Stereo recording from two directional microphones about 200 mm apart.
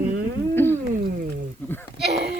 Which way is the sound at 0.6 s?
10° left (ahead or behind).